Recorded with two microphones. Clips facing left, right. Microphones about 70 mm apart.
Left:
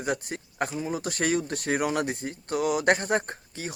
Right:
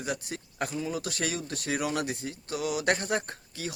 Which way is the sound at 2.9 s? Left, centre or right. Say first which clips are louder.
Left 4 dB; left.